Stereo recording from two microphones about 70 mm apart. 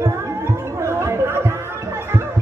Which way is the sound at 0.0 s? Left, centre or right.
Right.